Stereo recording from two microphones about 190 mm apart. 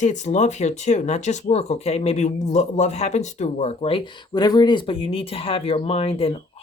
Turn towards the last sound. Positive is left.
turn(degrees=30)  # may be behind; listen again after turning